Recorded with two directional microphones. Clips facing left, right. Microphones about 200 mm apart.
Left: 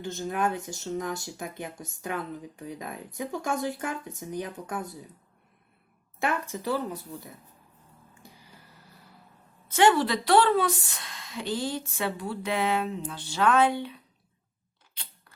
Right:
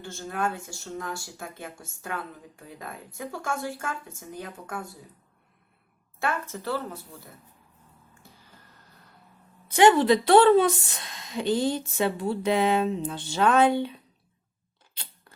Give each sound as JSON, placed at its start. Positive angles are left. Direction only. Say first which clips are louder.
{"t": 0.0, "sound": "speech", "louder": "left 2 dB", "side_deg": 20}
{"t": 6.1, "sound": "speech", "louder": "left 1 dB", "side_deg": 15}
{"t": 8.2, "sound": "a sound", "louder": "left 3 dB", "side_deg": 15}
{"t": 9.6, "sound": "a woman's voice", "louder": "right 4 dB", "side_deg": -15}